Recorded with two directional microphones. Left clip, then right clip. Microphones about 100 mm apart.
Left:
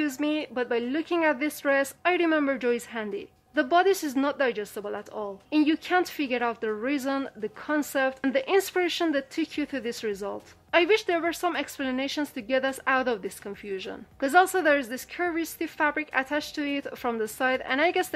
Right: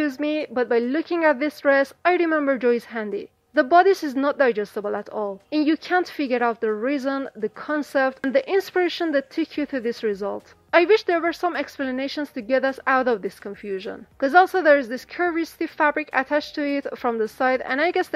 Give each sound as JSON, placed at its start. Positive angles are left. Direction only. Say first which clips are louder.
{"t": 0.0, "sound": "a woman's voice", "louder": "right 4 dB", "side_deg": -40}